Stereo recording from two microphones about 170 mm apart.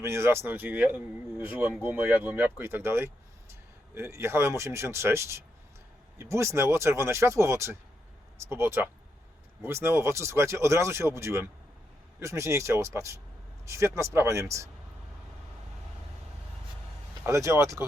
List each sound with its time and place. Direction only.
0.0 s speech: 15° right (ahead or behind)
17.2 s speech: 15° right (ahead or behind)